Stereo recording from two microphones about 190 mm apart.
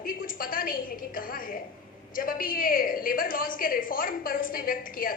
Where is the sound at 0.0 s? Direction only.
50° left (ahead or behind).